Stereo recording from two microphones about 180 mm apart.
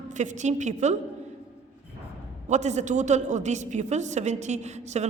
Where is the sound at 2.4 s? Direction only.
40° right (ahead or behind).